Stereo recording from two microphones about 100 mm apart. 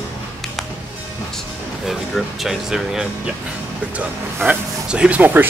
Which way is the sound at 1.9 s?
Centre (ahead or behind).